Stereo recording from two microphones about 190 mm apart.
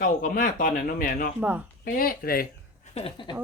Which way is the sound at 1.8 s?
50° left (ahead or behind).